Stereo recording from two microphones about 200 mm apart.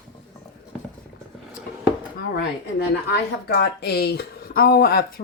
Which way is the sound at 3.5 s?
55° left (ahead or behind).